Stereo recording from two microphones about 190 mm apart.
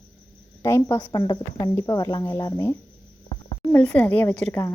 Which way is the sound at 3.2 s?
20° left (ahead or behind).